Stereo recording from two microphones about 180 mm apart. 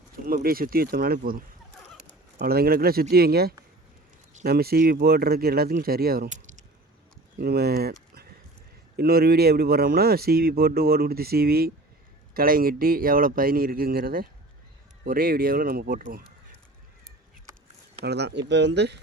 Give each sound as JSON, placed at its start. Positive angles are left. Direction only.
{"t": 0.3, "sound": "speech", "side_deg": -55}
{"t": 2.0, "sound": "speech", "side_deg": -65}
{"t": 7.3, "sound": "speech", "side_deg": -60}
{"t": 18.0, "sound": "speech", "side_deg": -70}